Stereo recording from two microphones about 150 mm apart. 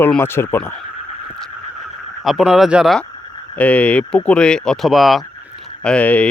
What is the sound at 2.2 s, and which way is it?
Speech, 5° right (ahead or behind).